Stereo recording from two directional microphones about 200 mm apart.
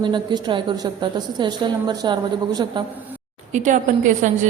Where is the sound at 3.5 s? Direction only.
40° right (ahead or behind).